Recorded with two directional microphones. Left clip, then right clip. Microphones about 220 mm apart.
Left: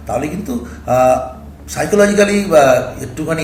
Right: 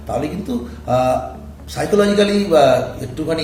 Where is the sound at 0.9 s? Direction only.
Centre (ahead or behind).